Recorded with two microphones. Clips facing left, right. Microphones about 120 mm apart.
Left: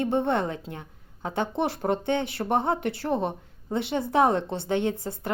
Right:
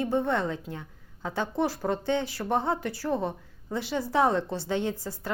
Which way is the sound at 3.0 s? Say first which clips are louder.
Left 2 dB; 20° left (ahead or behind).